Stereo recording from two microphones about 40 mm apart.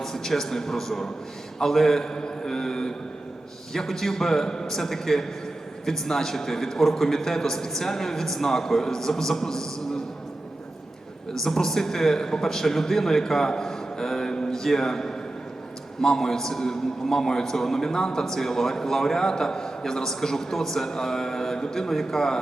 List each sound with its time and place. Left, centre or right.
0.0 s a man's voice: centre
11.4 s a man's voice: centre